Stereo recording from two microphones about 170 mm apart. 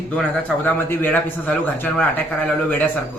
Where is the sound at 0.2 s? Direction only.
10° left (ahead or behind).